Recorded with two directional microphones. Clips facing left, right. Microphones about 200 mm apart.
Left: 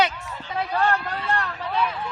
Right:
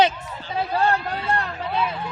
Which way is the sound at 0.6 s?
30° right (ahead or behind).